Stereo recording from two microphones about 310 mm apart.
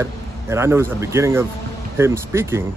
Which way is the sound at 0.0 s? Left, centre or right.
Centre.